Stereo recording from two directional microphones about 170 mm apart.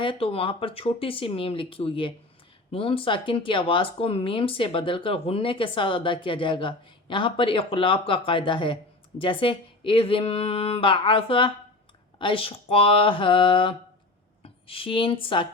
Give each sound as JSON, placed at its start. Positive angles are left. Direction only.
{"t": 0.0, "sound": "speech", "side_deg": 30}